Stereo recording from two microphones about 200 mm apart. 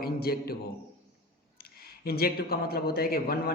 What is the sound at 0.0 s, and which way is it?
Speech, 50° left (ahead or behind).